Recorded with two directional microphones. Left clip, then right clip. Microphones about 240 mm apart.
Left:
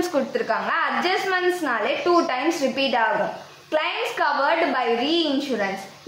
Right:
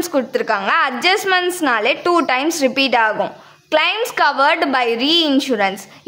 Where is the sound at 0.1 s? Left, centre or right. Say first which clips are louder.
Right 5 dB; right.